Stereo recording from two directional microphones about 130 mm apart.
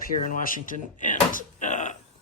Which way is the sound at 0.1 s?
90° left.